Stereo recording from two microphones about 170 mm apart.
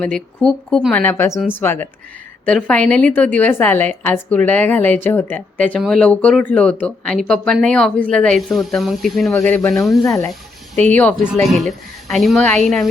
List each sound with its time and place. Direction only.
0.0 s a woman's voice: 5° left (ahead or behind)
9.3 s speech: 15° left (ahead or behind)
9.8 s a woman's voice: centre (ahead or behind)
10.1 s speech: 20° left (ahead or behind)
11.4 s a woman's voice: centre (ahead or behind)